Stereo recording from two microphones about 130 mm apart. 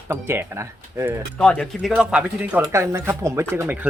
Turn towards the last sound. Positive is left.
turn(degrees=-15)  # may be behind; listen again after turning